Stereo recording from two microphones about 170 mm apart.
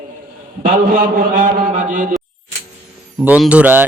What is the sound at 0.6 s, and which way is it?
A man's voice, 60° right (ahead or behind).